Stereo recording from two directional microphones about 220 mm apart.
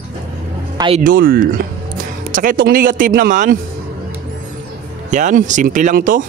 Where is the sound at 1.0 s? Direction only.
40° right (ahead or behind).